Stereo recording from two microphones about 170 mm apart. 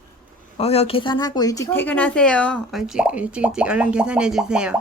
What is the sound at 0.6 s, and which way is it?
Speech, 35° left (ahead or behind).